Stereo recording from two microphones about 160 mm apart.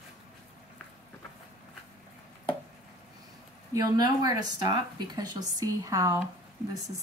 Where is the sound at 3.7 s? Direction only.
25° right (ahead or behind).